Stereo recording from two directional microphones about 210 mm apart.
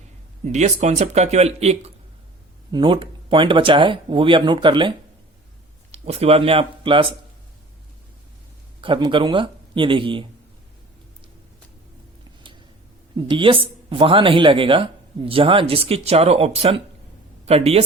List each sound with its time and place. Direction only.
0.4 s speech: 30° right (ahead or behind)
8.8 s speech: 25° right (ahead or behind)
13.1 s speech: 25° right (ahead or behind)